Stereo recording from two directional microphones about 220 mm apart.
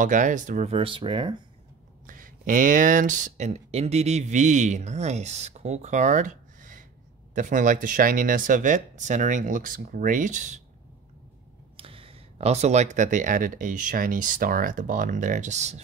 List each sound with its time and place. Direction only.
0.0 s speech: 35° right (ahead or behind)
2.0 s speech: 40° right (ahead or behind)
11.7 s speech: 25° right (ahead or behind)